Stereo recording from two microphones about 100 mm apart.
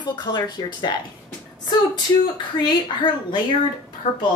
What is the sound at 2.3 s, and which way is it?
A woman's voice, 50° left (ahead or behind).